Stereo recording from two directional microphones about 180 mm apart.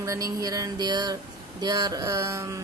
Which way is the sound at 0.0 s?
15° right (ahead or behind).